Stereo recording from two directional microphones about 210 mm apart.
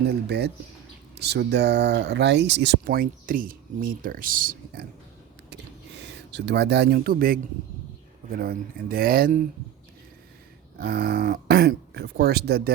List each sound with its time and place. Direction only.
0.1 s speech: 50° right (ahead or behind)
6.0 s speech: 55° right (ahead or behind)
10.8 s speech: 45° right (ahead or behind)